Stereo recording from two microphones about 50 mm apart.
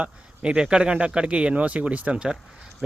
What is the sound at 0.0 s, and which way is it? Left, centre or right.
Speech, centre.